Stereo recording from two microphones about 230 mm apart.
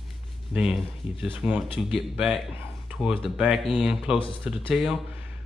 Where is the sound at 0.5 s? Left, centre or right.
Centre.